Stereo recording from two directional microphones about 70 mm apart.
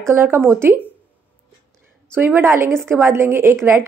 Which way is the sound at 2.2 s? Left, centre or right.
Right.